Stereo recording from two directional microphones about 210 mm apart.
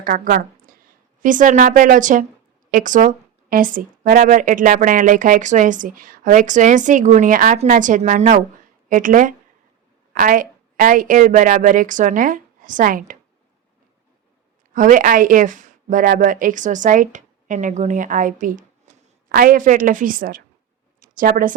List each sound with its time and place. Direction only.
0.0 s a woman's voice: 40° right (ahead or behind)
14.7 s speech: 40° right (ahead or behind)